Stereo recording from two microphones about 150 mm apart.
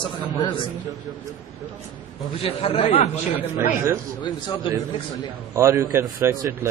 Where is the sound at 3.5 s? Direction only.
15° right (ahead or behind).